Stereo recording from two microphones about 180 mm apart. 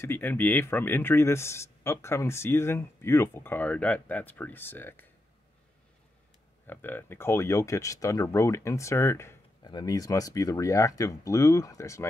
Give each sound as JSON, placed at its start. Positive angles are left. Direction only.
{"t": 0.0, "sound": "speech", "side_deg": 10}
{"t": 6.7, "sound": "speech", "side_deg": 10}